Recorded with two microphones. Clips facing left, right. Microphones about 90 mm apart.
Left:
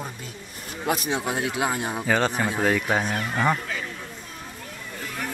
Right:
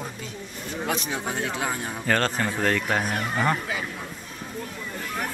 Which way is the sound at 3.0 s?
10° right (ahead or behind).